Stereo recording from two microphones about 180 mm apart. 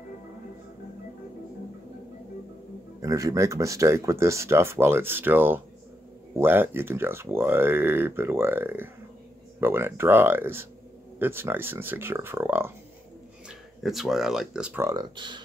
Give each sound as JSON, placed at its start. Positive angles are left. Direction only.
{"t": 3.0, "sound": "speech", "side_deg": -20}
{"t": 13.5, "sound": "speech", "side_deg": 0}